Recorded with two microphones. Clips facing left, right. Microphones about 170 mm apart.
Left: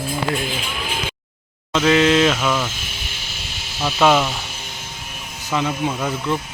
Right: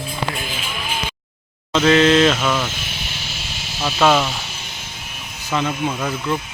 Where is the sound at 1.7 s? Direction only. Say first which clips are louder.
Right 2 dB; 10° left (ahead or behind).